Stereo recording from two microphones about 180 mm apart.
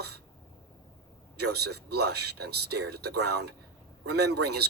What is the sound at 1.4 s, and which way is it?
Speech, 65° right (ahead or behind).